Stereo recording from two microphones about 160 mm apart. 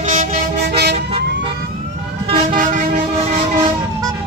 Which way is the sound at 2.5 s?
55° right (ahead or behind).